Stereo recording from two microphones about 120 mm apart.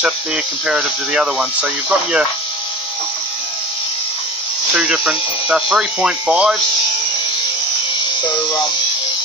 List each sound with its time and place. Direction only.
0.7 s speech: 5° right (ahead or behind)
4.7 s speech: 10° right (ahead or behind)